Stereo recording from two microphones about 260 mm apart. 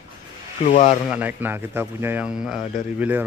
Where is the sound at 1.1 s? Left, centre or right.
Centre.